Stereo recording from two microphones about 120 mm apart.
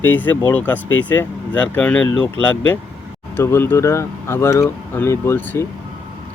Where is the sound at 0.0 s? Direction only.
15° left (ahead or behind).